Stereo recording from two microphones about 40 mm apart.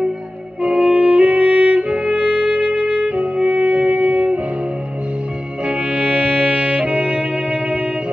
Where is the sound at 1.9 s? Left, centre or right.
Right.